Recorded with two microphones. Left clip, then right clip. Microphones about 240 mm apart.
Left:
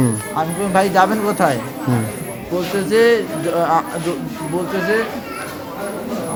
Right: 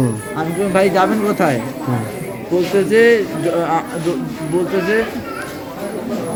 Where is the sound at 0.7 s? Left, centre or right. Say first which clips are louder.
Even; centre.